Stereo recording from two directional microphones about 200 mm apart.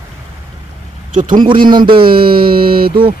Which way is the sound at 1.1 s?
40° right (ahead or behind).